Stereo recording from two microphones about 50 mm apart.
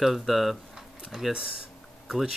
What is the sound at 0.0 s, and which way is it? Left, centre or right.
Speech, centre.